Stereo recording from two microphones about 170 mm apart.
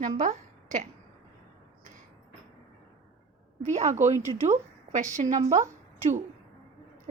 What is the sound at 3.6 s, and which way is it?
A woman's voice, 45° right (ahead or behind).